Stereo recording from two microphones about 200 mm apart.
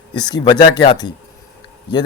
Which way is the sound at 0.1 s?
20° left (ahead or behind).